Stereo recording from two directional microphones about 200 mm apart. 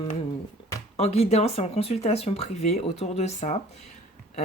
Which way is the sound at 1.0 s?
30° left (ahead or behind).